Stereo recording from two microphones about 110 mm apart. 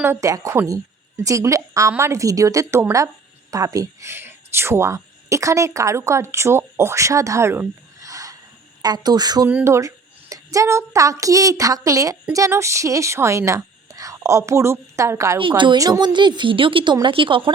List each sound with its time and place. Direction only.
0.0 s a woman's voice: 25° right (ahead or behind)
8.0 s a sound: 30° right (ahead or behind)
8.8 s a woman's voice: 40° right (ahead or behind)
9.6 s a woman's voice: 25° right (ahead or behind)
15.4 s a woman's voice: 50° right (ahead or behind)